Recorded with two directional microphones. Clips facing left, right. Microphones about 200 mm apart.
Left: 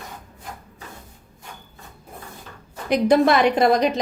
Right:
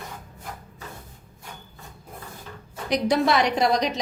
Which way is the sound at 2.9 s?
55° left (ahead or behind).